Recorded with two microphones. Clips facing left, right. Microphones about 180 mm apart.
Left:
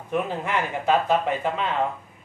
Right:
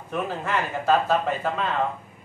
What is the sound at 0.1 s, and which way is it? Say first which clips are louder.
A man's voice: left 1 dB; 15° left (ahead or behind).